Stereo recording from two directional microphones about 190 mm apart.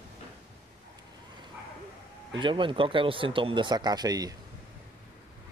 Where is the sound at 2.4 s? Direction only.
25° right (ahead or behind).